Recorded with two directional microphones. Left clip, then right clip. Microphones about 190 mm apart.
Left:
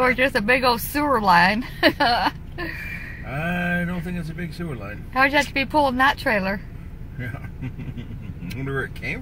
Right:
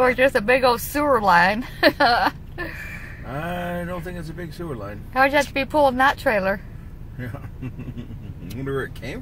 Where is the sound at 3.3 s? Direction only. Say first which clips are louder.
Left 3 dB; 30° right (ahead or behind).